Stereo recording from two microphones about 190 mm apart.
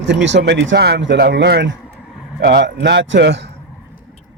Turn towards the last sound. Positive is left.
turn(degrees=-65)  # may be behind; listen again after turning